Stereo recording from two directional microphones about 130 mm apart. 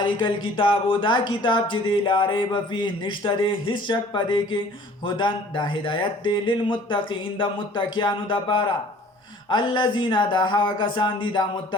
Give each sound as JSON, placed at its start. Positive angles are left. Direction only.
{"t": 0.0, "sound": "speech", "side_deg": 40}